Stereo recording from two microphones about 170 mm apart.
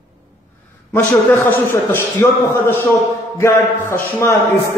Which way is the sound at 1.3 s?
15° left (ahead or behind).